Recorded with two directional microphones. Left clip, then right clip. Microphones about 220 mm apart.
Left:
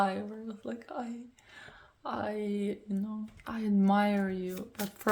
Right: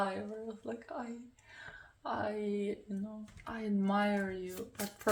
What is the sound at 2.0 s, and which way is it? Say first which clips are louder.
Speech: left 2 dB; 40° left (ahead or behind).